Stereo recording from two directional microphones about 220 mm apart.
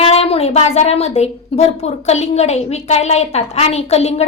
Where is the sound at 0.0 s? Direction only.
25° left (ahead or behind).